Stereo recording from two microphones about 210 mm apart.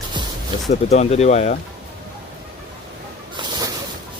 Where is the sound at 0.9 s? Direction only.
30° left (ahead or behind).